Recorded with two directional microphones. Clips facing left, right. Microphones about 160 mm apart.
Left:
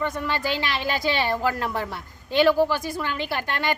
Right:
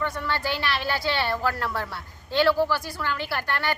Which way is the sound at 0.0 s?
15° left (ahead or behind).